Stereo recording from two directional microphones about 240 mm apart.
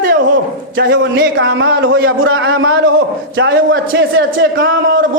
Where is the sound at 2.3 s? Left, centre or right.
Right.